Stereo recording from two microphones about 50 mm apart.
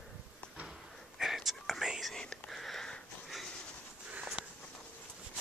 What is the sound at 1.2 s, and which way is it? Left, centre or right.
Whispering, centre.